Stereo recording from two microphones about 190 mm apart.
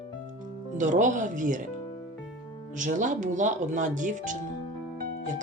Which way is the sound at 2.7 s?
40° right (ahead or behind).